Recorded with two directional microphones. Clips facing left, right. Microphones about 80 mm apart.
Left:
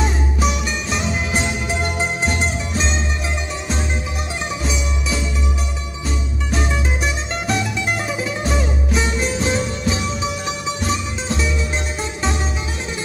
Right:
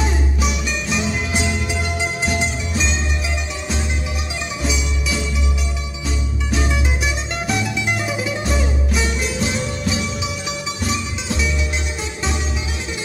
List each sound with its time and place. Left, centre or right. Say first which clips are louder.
0.4 s music: left 2 dB; centre
2.2 s music: left 1 dB; left
10.4 s music: left 2 dB; left